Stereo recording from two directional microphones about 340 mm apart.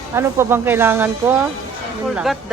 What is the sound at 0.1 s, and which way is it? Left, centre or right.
Speech, centre.